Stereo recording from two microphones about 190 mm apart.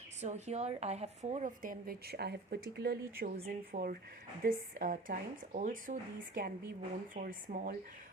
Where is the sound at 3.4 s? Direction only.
35° right (ahead or behind).